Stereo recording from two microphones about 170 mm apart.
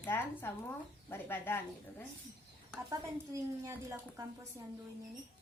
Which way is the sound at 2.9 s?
15° right (ahead or behind).